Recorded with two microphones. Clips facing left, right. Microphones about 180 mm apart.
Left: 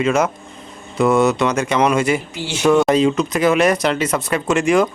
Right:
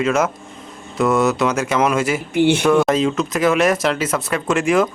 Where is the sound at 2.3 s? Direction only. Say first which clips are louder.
Right 12 dB; 60° right (ahead or behind).